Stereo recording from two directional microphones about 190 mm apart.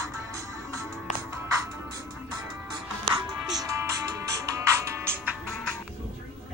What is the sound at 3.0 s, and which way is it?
Music, 20° right (ahead or behind).